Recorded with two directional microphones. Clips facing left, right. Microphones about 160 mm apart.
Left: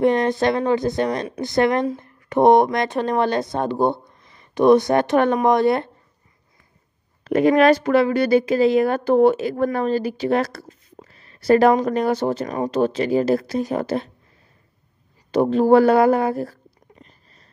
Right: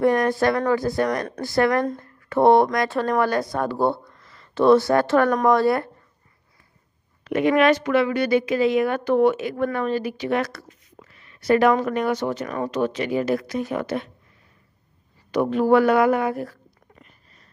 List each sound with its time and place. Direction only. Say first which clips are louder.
0.0 s speech: left 1 dB; 20° left (ahead or behind)
7.2 s a woman's voice: left 3 dB; 40° left (ahead or behind)
15.3 s a woman's voice: left 3 dB; 30° left (ahead or behind)
17.0 s a sound: left 3 dB; 35° left (ahead or behind)